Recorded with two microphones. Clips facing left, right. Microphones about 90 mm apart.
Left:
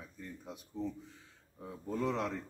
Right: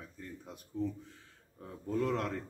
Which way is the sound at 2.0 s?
5° left (ahead or behind).